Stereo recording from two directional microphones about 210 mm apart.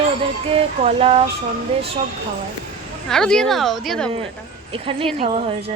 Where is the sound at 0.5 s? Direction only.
30° right (ahead or behind).